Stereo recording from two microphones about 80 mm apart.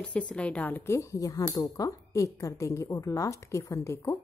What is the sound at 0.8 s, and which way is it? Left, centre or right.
Speech, left.